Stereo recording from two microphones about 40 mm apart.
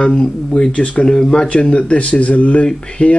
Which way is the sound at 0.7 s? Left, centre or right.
Left.